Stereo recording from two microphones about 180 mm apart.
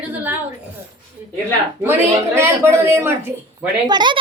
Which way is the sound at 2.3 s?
15° right (ahead or behind).